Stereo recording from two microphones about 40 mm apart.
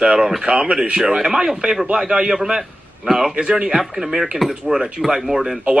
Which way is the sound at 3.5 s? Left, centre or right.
Centre.